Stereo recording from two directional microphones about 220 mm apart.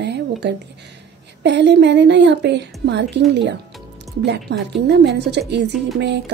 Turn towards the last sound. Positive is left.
turn(degrees=-50)  # may be behind; listen again after turning